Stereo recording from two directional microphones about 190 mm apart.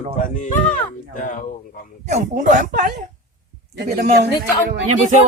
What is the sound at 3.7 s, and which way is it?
Speech, 60° right (ahead or behind).